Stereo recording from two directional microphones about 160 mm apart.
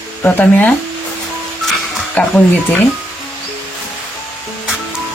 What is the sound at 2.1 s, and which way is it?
Speech, 10° left (ahead or behind).